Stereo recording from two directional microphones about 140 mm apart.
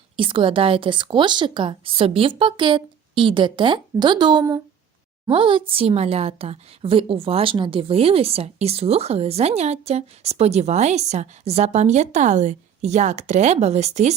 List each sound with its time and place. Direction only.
0.2 s a woman's voice: 40° right (ahead or behind)